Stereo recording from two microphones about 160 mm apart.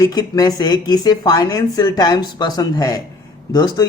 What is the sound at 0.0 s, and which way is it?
A man's voice, 25° left (ahead or behind).